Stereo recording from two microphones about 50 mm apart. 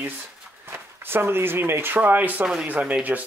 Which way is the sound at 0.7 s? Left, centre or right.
Right.